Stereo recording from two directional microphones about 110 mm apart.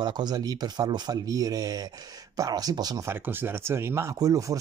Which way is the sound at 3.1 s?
20° right (ahead or behind).